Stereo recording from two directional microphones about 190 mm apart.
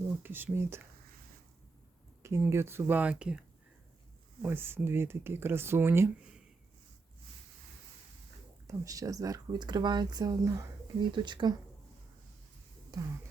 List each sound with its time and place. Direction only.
0.2 s speech: 10° right (ahead or behind)
2.2 s speech: 15° right (ahead or behind)
4.4 s speech: 10° right (ahead or behind)
8.6 s speech: 15° right (ahead or behind)
12.9 s a sound: 20° right (ahead or behind)